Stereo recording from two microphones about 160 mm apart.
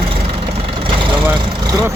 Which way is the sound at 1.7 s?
25° right (ahead or behind).